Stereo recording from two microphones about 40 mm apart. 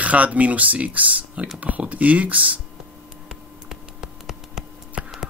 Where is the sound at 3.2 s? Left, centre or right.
Centre.